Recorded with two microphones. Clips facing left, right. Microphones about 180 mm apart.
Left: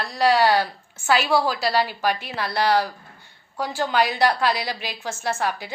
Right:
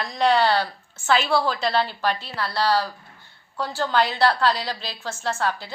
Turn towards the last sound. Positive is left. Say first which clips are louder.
# even
turn(degrees=15)  # may be behind; listen again after turning